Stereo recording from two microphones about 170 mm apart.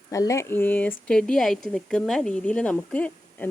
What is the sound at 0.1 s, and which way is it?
Speech, 20° left (ahead or behind).